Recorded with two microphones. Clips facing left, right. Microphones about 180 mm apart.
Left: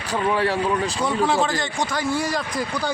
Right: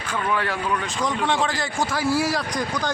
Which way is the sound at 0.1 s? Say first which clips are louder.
Left 4 dB; 30° left (ahead or behind).